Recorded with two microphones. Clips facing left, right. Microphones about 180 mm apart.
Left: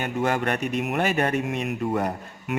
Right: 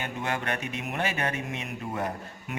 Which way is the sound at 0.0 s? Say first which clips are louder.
Left 7 dB; 45° left (ahead or behind).